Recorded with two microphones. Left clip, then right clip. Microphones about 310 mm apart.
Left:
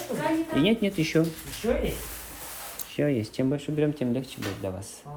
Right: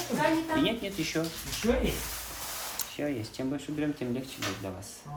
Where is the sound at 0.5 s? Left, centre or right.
Left.